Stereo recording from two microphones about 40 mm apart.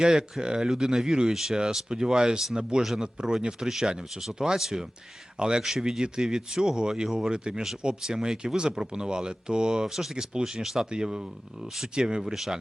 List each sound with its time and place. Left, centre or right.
0.0 s speech: centre
9.8 s speech: centre
10.3 s speech: centre
10.6 s speech: centre
10.8 s speech: centre